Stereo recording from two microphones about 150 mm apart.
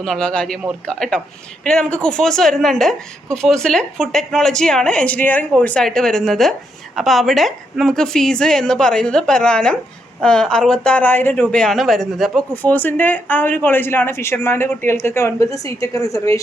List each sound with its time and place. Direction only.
0.0 s a woman's voice: 5° left (ahead or behind)
12.7 s speech: 10° left (ahead or behind)